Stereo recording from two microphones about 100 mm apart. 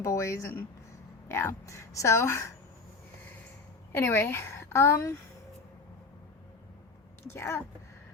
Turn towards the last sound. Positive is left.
turn(degrees=30)  # may be behind; listen again after turning